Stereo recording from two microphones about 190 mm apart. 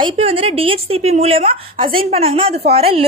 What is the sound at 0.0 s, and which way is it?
A woman's voice, 30° right (ahead or behind).